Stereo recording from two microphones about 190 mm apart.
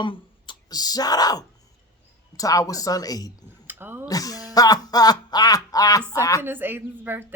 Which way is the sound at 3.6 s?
10° right (ahead or behind).